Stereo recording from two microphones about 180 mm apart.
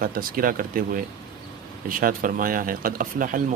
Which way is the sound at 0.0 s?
50° right (ahead or behind).